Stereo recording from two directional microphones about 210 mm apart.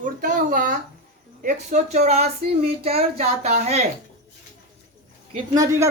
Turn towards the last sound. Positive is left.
turn(degrees=-20)  # may be behind; listen again after turning